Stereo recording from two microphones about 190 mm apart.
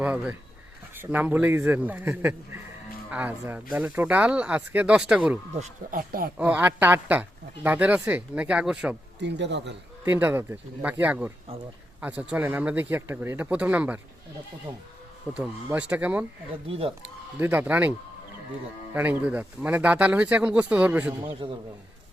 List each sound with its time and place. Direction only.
0.0 s a sound: 10° right (ahead or behind)
0.9 s speech: 10° right (ahead or behind)
5.5 s speech: 40° right (ahead or behind)
6.3 s speech: 5° right (ahead or behind)
9.1 s speech: 65° right (ahead or behind)
10.0 s speech: 10° right (ahead or behind)
15.4 s speech: 5° right (ahead or behind)
16.6 s speech: 30° right (ahead or behind)
17.4 s speech: 10° right (ahead or behind)
18.9 s speech: 10° right (ahead or behind)
21.4 s a man's voice: 25° right (ahead or behind)